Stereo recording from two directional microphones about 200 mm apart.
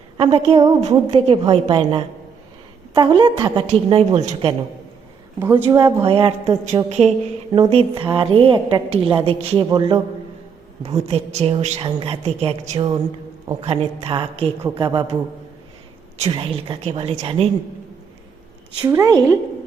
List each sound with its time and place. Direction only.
0.2 s a woman's voice: 30° right (ahead or behind)
5.4 s speech: 10° right (ahead or behind)
6.1 s a woman's voice: 30° right (ahead or behind)
18.9 s speech: 15° right (ahead or behind)